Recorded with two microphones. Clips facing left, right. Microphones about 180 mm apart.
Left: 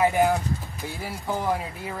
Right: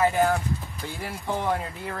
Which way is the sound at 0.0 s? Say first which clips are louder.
Left 1 dB; 15° left (ahead or behind).